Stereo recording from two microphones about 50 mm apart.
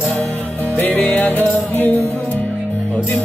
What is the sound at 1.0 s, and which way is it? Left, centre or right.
Music, left.